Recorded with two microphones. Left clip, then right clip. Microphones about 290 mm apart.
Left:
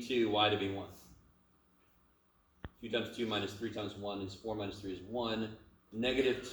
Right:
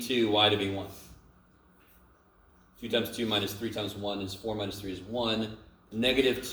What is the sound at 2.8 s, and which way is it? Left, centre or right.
Speech, right.